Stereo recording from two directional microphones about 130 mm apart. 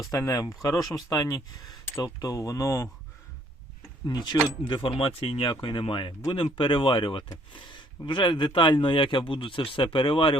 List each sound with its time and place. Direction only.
0.0 s speech: 25° left (ahead or behind)
4.0 s speech: 35° left (ahead or behind)